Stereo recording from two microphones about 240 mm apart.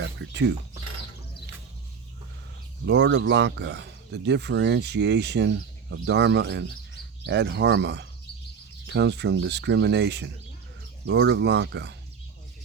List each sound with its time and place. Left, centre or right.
0.0 s speech: right
2.8 s speech: right